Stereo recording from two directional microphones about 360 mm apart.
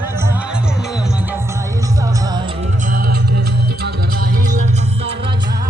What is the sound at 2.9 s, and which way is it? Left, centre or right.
Music, right.